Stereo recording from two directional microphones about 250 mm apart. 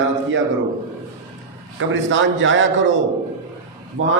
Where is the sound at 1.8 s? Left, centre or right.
Right.